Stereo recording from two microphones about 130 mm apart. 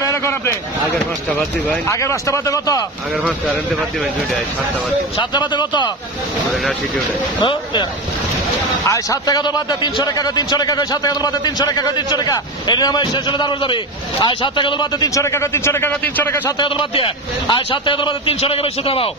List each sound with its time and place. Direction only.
1.7 s a man's voice: 20° left (ahead or behind)
5.3 s a man's voice: 35° left (ahead or behind)
8.8 s a man's voice: 25° left (ahead or behind)
15.0 s a man's voice: 25° left (ahead or behind)
16.5 s a man's voice: 40° left (ahead or behind)